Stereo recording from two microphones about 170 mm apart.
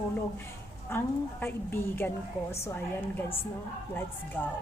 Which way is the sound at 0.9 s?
10° left (ahead or behind).